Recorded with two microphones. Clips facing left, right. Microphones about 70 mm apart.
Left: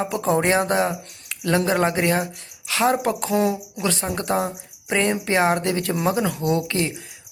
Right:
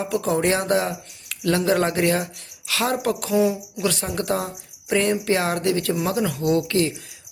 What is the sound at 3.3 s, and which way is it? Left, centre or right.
Speech, left.